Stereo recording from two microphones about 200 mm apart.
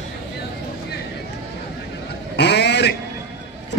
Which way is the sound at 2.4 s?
60° left (ahead or behind).